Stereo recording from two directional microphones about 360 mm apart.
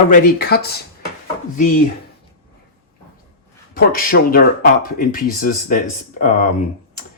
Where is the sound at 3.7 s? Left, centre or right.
Left.